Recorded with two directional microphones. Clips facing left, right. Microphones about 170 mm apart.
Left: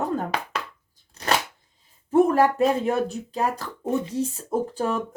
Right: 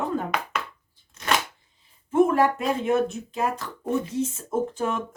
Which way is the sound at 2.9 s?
35° left (ahead or behind).